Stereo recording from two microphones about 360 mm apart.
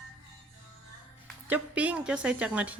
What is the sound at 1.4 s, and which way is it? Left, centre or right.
A woman's voice, centre.